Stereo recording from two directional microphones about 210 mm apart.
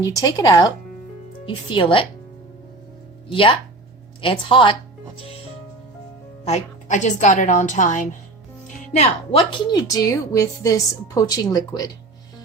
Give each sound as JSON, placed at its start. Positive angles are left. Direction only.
{"t": 0.0, "sound": "speech", "side_deg": 15}
{"t": 3.2, "sound": "speech", "side_deg": 25}
{"t": 6.4, "sound": "a woman's voice", "side_deg": 35}